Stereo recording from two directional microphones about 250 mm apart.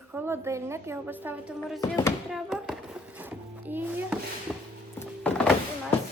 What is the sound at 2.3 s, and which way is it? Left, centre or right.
Music, centre.